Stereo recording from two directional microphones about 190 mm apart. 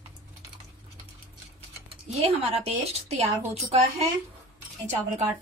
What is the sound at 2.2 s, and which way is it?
A woman's voice, 35° right (ahead or behind).